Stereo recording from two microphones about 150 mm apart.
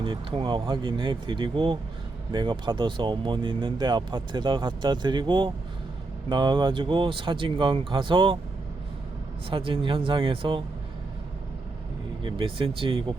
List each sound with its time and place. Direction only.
0.0 s speech: 35° right (ahead or behind)
9.5 s speech: 35° right (ahead or behind)
12.2 s speech: 35° right (ahead or behind)